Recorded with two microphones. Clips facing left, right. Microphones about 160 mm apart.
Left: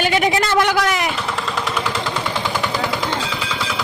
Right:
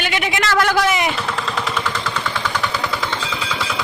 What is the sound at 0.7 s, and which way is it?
Speech, centre (ahead or behind).